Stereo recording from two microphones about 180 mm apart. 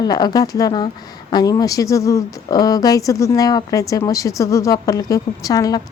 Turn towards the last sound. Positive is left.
turn(degrees=20)  # may be behind; listen again after turning